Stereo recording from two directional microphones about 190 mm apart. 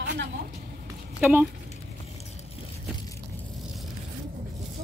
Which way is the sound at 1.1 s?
10° right (ahead or behind).